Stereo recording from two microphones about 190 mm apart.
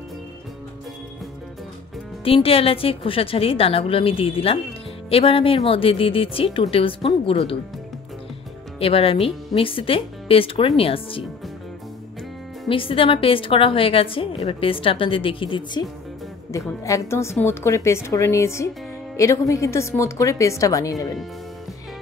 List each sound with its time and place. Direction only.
2.2 s a woman's voice: 30° left (ahead or behind)
8.7 s a woman's voice: 30° left (ahead or behind)
12.6 s a woman's voice: 30° left (ahead or behind)